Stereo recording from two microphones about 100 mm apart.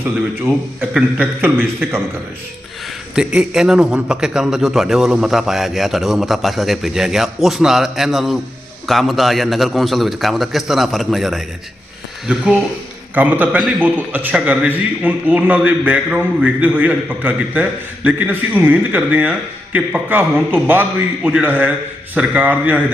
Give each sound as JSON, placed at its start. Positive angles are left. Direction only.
{"t": 0.8, "sound": "a man's voice", "side_deg": -20}
{"t": 3.2, "sound": "a man's voice", "side_deg": -5}
{"t": 12.3, "sound": "a man's voice", "side_deg": -10}